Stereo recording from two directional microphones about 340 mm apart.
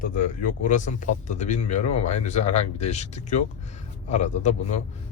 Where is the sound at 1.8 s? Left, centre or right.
Left.